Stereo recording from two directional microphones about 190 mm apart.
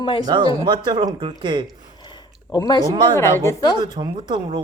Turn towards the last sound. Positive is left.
turn(degrees=-25)  # may be behind; listen again after turning